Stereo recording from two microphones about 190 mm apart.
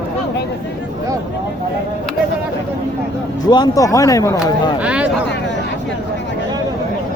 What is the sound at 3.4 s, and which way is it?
Speech, 20° left (ahead or behind).